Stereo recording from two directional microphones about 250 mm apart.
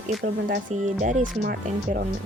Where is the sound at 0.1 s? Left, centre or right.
Right.